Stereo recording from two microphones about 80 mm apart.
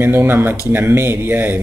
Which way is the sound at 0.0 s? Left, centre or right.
Right.